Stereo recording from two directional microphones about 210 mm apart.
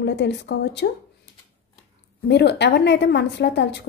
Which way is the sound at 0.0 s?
55° left (ahead or behind).